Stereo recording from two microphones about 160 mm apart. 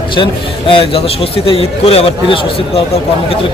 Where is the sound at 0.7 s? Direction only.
35° left (ahead or behind).